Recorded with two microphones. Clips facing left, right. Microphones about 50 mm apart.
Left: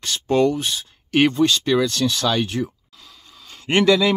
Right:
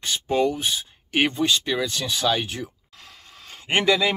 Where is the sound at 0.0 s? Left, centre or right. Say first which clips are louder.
Left 4 dB; centre.